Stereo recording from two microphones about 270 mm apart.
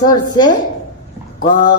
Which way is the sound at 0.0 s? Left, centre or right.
Centre.